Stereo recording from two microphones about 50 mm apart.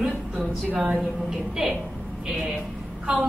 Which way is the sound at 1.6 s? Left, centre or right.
Centre.